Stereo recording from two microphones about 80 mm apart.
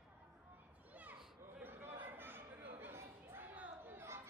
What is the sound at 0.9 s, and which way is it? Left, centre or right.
Children playing, centre.